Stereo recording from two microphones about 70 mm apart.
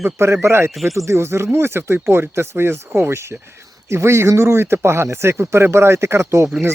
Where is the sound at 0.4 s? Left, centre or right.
Right.